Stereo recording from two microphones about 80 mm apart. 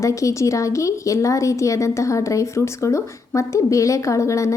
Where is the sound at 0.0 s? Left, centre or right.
Left.